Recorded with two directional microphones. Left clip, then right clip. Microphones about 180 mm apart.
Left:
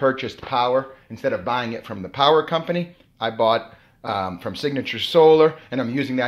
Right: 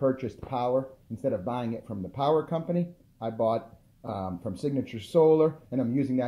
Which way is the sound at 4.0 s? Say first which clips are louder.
Left 10 dB; 25° left (ahead or behind).